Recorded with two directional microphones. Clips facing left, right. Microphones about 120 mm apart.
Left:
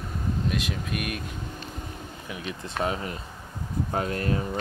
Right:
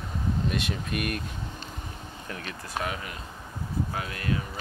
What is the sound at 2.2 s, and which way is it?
Speech, 10° left (ahead or behind).